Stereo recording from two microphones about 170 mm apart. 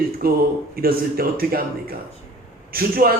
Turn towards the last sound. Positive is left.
turn(degrees=-60)  # may be behind; listen again after turning